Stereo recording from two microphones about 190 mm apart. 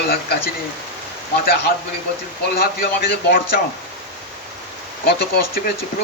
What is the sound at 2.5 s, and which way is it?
A man's voice, 50° left (ahead or behind).